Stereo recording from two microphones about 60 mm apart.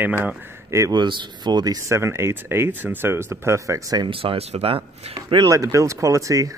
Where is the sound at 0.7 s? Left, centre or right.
Right.